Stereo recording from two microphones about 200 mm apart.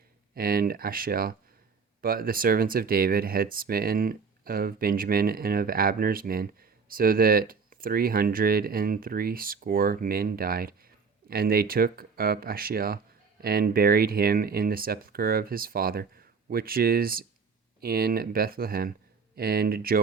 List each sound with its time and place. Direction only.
0.3 s speech: 45° right (ahead or behind)